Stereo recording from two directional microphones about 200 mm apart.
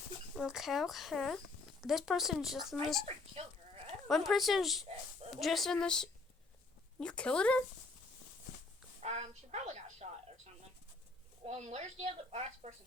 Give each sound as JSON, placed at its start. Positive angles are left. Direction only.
{"t": 0.3, "sound": "speech", "side_deg": 0}
{"t": 3.4, "sound": "speech", "side_deg": -30}
{"t": 4.1, "sound": "speech", "side_deg": 0}
{"t": 9.0, "sound": "a sound", "side_deg": -30}
{"t": 11.4, "sound": "speech", "side_deg": -35}